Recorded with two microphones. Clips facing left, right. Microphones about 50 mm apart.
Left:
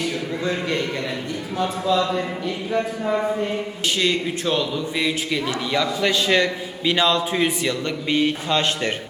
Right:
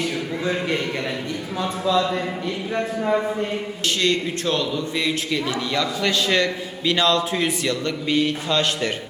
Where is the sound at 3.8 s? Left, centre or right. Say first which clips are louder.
Even; centre; by 8.9 s left.